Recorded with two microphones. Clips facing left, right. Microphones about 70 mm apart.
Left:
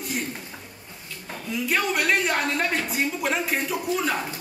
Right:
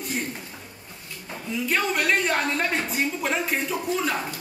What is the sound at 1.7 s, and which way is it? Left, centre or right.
A man's voice, centre.